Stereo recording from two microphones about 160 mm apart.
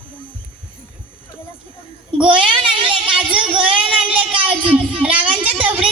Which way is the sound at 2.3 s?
30° right (ahead or behind).